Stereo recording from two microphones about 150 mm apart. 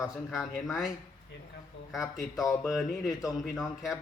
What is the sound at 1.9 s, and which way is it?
Mantra, centre (ahead or behind).